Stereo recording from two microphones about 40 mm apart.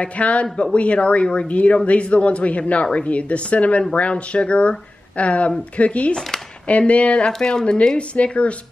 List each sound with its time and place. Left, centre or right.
0.0 s a woman's voice: left
7.3 s a woman's voice: centre; by 8.5 s left